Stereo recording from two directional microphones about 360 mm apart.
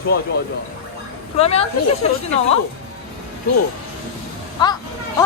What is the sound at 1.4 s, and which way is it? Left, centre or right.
Speech, centre.